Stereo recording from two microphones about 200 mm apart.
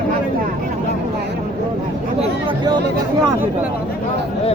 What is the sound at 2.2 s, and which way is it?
Chatter, 20° right (ahead or behind).